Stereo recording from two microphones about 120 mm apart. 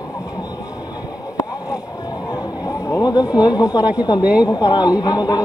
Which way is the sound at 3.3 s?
30° left (ahead or behind).